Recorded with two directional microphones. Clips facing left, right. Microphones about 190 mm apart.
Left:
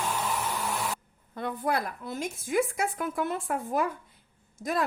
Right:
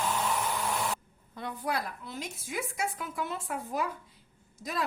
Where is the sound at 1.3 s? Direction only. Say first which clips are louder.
Left 4 dB; 55° left (ahead or behind).